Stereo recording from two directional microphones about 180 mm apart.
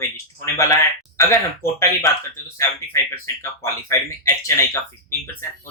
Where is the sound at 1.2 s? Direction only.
15° left (ahead or behind).